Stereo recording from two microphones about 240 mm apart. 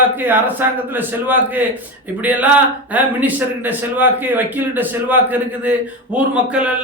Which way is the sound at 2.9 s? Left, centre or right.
Centre.